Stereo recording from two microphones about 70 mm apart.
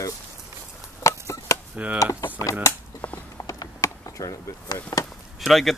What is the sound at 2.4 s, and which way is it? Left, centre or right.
Speech, left.